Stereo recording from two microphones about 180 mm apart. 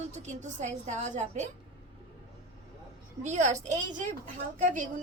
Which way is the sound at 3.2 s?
40° right (ahead or behind).